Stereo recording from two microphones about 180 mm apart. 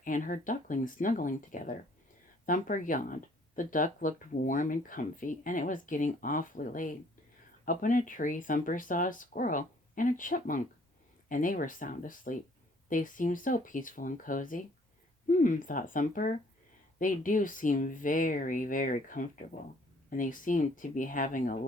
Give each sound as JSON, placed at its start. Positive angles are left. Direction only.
{"t": 0.0, "sound": "speech", "side_deg": 45}